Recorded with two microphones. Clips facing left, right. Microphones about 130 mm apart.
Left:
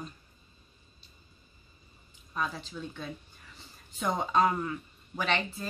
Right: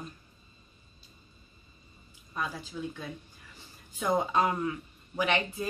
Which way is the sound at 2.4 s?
10° right (ahead or behind).